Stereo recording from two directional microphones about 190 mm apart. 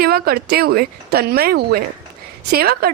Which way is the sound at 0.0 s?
55° right (ahead or behind).